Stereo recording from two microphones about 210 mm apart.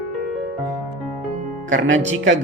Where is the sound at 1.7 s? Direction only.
60° right (ahead or behind).